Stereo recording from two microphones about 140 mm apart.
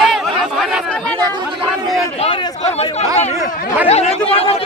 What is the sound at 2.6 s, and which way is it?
Chatter, 50° left (ahead or behind).